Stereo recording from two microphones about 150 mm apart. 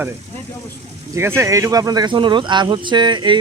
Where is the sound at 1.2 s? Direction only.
15° right (ahead or behind).